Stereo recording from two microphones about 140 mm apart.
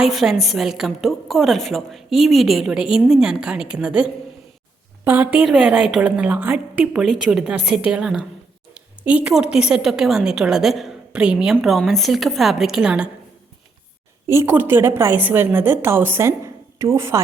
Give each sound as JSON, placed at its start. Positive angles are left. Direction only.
{"t": 0.0, "sound": "a woman's voice", "side_deg": 0}
{"t": 14.3, "sound": "a woman's voice", "side_deg": -15}